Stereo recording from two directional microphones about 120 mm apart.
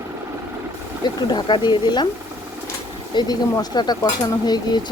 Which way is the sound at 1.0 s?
40° left (ahead or behind).